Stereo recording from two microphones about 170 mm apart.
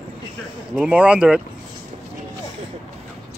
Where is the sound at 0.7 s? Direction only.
5° right (ahead or behind).